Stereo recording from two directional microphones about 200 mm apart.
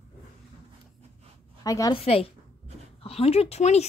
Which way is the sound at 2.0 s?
30° left (ahead or behind).